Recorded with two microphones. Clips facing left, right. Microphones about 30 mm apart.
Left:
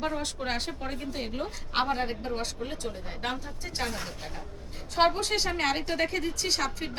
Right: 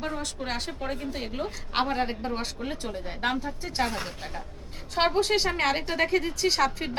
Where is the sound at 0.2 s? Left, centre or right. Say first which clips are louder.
Even; centre.